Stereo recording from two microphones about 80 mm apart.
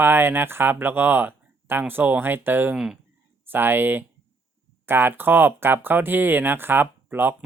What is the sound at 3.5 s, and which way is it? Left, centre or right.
Speech, right.